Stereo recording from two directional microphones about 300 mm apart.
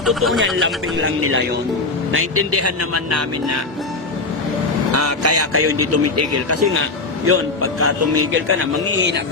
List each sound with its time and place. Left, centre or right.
0.0 s speech: centre
0.6 s a man's voice: right
4.9 s a man's voice: right